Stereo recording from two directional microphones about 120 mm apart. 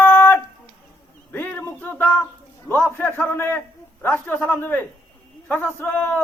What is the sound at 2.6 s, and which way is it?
A man's voice, 15° left (ahead or behind).